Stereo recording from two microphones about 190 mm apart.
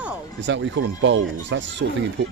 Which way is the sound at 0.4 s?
75° right (ahead or behind).